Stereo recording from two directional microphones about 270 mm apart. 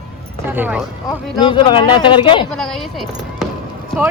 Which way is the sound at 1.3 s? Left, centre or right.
Centre.